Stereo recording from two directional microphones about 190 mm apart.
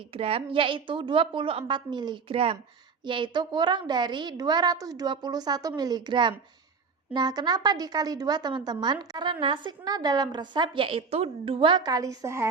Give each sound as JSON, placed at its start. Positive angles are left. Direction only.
{"t": 0.1, "sound": "a woman's voice", "side_deg": -30}